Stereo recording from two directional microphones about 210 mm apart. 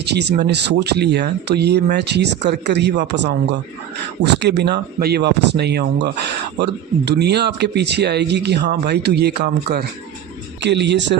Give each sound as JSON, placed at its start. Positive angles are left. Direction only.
{"t": 0.0, "sound": "speech", "side_deg": -55}